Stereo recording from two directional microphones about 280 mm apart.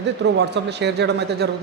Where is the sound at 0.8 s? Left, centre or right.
Right.